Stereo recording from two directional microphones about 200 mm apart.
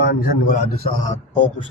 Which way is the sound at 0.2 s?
45° left (ahead or behind).